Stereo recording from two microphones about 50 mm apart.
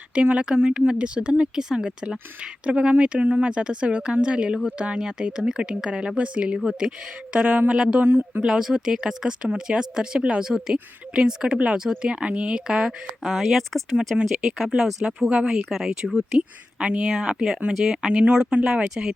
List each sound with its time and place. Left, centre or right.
0.1 s speech: right
7.7 s speech: centre
8.0 s speech: right
8.4 s speech: centre
13.3 s speech: centre
14.1 s speech: centre
16.8 s speech: right
17.1 s speech: centre